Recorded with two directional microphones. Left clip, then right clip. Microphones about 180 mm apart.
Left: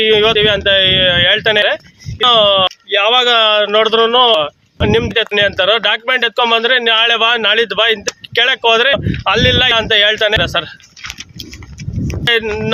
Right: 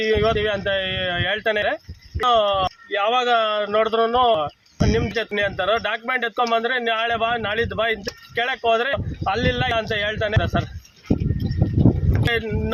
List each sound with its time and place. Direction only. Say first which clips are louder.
0.0 s speech: left 9 dB; 25° left (ahead or behind)
12.2 s speech: left 10 dB; 25° left (ahead or behind)